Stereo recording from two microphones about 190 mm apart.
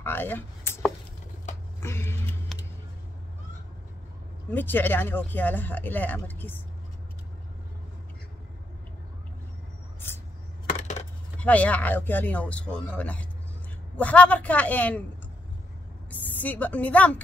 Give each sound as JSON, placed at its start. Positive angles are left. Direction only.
{"t": 0.0, "sound": "a sound", "side_deg": 10}
{"t": 4.5, "sound": "speech", "side_deg": 10}
{"t": 10.7, "sound": "coin", "side_deg": 40}
{"t": 11.3, "sound": "speech", "side_deg": 5}
{"t": 16.1, "sound": "a woman's voice", "side_deg": 10}